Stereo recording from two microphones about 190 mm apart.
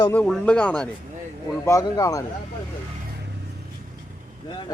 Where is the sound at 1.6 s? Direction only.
15° left (ahead or behind).